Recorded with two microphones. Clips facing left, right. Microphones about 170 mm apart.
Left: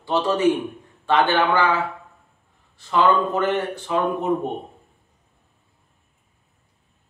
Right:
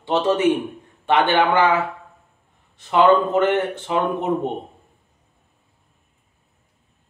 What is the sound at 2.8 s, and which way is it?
Speech, 20° right (ahead or behind).